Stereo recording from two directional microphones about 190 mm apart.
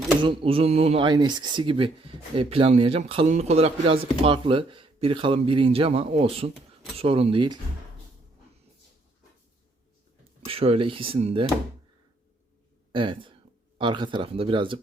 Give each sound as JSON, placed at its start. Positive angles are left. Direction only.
{"t": 0.2, "sound": "speech", "side_deg": -25}
{"t": 10.4, "sound": "speech", "side_deg": -30}
{"t": 12.9, "sound": "speech", "side_deg": -25}